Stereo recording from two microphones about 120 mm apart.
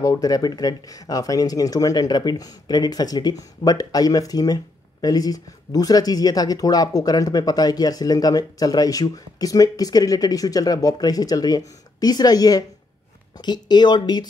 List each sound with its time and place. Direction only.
0.0 s speech: 30° left (ahead or behind)